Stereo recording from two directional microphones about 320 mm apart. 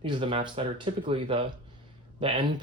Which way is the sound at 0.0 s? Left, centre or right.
Centre.